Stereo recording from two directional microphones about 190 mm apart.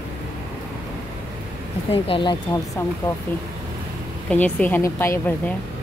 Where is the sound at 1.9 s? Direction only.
25° left (ahead or behind).